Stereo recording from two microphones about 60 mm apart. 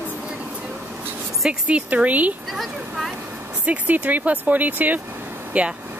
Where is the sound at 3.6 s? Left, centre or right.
Right.